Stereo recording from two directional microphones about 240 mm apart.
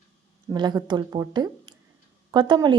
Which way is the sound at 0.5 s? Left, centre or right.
Centre.